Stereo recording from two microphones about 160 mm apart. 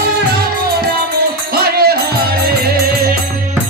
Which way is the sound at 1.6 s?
75° right (ahead or behind).